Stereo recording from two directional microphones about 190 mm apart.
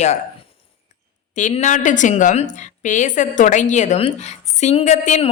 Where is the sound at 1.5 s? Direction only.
40° left (ahead or behind).